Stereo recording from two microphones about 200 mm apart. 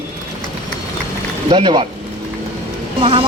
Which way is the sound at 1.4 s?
25° right (ahead or behind).